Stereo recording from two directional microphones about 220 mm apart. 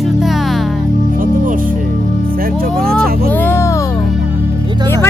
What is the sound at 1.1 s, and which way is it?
Music, 40° right (ahead or behind).